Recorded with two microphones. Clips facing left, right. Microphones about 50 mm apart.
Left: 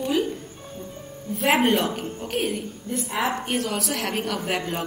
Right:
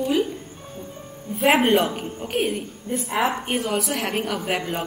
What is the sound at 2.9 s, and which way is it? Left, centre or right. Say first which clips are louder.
Speech: right 2 dB; right.